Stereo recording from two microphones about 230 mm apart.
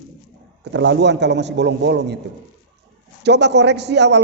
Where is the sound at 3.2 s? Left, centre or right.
Right.